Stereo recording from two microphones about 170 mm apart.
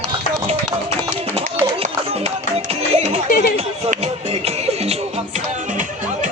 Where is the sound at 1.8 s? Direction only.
35° right (ahead or behind).